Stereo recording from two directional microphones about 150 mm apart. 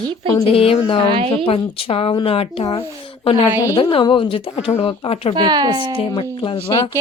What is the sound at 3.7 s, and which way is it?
Speech, 30° left (ahead or behind).